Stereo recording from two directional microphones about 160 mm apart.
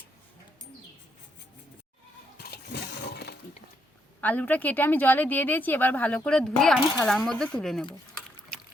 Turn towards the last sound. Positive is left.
turn(degrees=5)  # may be behind; listen again after turning